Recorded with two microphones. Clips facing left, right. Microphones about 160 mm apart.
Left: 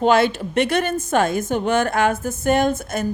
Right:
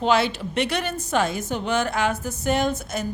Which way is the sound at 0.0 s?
50° left (ahead or behind).